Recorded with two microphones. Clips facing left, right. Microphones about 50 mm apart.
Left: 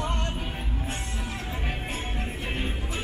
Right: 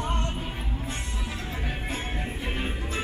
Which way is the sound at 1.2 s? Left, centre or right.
Left.